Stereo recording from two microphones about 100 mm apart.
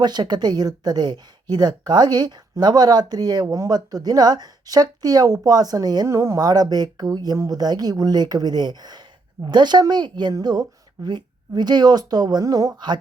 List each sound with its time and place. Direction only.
0.0 s a woman's voice: 45° right (ahead or behind)
3.4 s speech: 30° right (ahead or behind)
3.7 s speech: 40° right (ahead or behind)
6.1 s a woman's voice: 30° right (ahead or behind)